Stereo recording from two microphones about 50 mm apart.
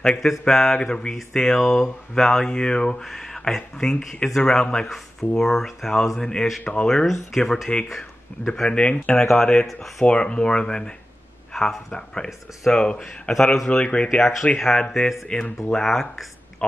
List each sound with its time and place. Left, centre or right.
0.0 s speech: centre
3.0 s speech: centre
6.6 s speech: left
7.1 s speech: centre
8.5 s speech: centre
9.2 s speech: centre
10.0 s speech: centre
13.0 s speech: centre
13.7 s speech: left
14.6 s speech: centre
15.3 s speech: left
15.7 s speech: centre